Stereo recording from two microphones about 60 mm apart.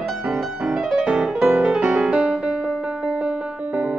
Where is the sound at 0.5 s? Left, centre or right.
Centre.